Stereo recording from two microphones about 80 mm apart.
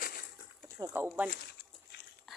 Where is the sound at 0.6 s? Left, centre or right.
Right.